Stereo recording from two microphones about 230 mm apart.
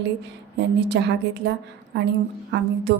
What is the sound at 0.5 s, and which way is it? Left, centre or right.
Speech, right.